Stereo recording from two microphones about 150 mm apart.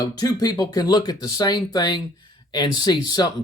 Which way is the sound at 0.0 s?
25° left (ahead or behind).